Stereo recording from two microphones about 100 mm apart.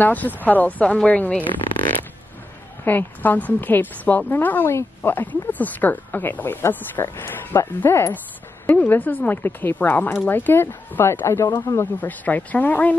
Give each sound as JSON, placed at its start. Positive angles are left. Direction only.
{"t": 0.0, "sound": "speech", "side_deg": 20}
{"t": 2.8, "sound": "a woman's voice", "side_deg": 20}
{"t": 12.0, "sound": "speech", "side_deg": 15}